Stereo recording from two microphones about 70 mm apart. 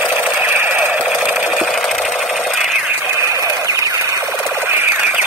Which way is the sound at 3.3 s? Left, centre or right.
Right.